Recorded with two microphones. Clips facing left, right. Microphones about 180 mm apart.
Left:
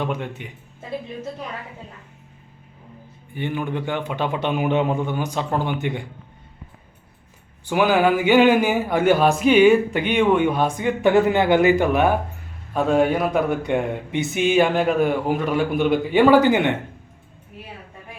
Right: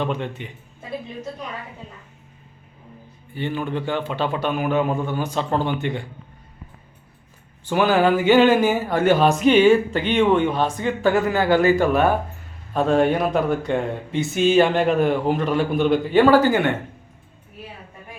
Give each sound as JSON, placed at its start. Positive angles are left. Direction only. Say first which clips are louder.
{"t": 0.0, "sound": "speech", "louder": "right 1 dB", "side_deg": 10}
{"t": 3.3, "sound": "speech", "louder": "even", "side_deg": 15}
{"t": 7.7, "sound": "speech", "louder": "even", "side_deg": 10}